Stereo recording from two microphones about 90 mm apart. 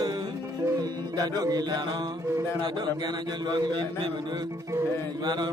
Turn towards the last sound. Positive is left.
turn(degrees=-55)  # may be behind; listen again after turning